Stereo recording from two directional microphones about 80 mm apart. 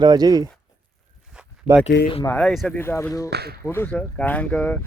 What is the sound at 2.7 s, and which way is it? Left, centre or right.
Speech, left.